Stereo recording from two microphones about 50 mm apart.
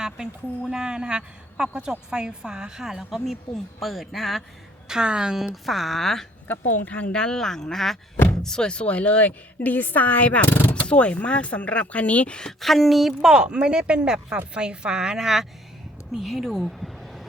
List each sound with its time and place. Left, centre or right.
0.7 s a woman's voice: centre
4.9 s a woman's voice: centre
5.6 s speech: centre
6.5 s speech: left
9.6 s speech: left
10.5 s speech: left
10.8 s speech: left
12.5 s a woman's voice: centre